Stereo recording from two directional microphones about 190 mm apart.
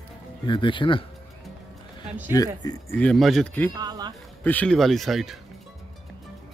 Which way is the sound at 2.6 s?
20° left (ahead or behind).